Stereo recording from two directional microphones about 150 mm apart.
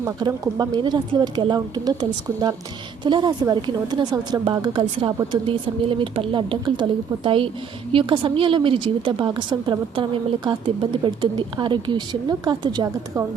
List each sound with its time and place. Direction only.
0.0 s a woman's voice: 20° right (ahead or behind)